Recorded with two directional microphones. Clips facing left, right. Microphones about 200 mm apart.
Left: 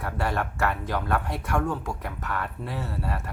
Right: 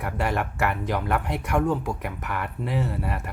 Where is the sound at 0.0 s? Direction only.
15° right (ahead or behind).